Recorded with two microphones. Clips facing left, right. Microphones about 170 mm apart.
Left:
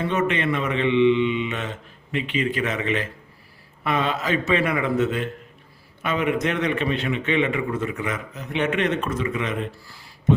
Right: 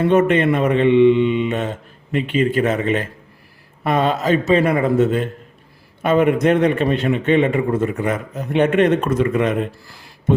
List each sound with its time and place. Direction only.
0.0 s a man's voice: 50° right (ahead or behind)